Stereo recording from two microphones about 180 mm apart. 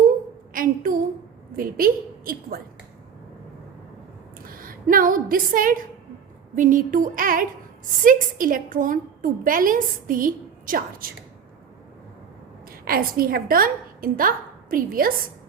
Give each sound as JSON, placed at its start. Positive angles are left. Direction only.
{"t": 0.5, "sound": "a sound", "side_deg": -50}
{"t": 1.5, "sound": "a woman's voice", "side_deg": -50}
{"t": 4.4, "sound": "a woman's voice", "side_deg": -50}
{"t": 12.8, "sound": "a woman's voice", "side_deg": -55}